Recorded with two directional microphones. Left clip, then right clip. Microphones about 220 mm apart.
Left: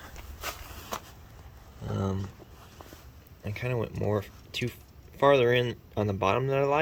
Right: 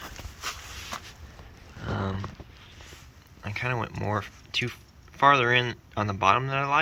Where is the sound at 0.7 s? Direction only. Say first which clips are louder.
Right 1 dB; 40° left (ahead or behind).